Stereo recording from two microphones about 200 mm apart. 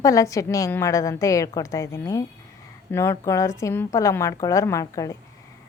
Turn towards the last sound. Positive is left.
turn(degrees=15)  # may be behind; listen again after turning